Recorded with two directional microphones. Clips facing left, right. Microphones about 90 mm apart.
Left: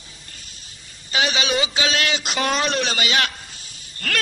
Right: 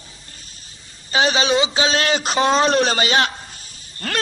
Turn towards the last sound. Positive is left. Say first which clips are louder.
# right 1 dB
turn(degrees=-30)  # may be behind; listen again after turning